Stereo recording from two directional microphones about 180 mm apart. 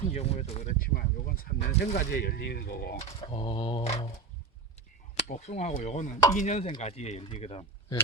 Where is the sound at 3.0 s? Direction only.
30° left (ahead or behind).